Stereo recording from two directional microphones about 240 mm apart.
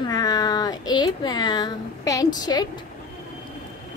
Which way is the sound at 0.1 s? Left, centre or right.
Centre.